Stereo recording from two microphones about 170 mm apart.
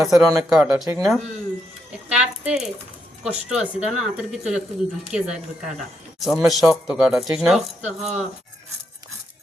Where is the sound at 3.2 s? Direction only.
5° right (ahead or behind).